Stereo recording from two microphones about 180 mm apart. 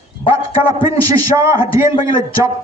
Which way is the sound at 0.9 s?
20° right (ahead or behind).